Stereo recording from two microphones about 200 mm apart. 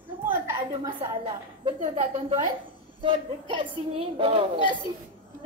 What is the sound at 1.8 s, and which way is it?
A woman's voice, 30° right (ahead or behind).